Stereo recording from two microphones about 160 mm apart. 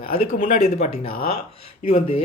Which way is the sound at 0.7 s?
40° left (ahead or behind).